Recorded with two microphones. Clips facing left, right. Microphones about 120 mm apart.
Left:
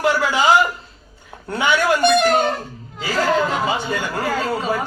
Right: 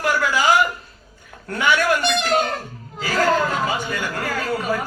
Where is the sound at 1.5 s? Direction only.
25° left (ahead or behind).